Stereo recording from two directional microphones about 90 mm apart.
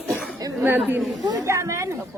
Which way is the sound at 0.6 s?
20° right (ahead or behind).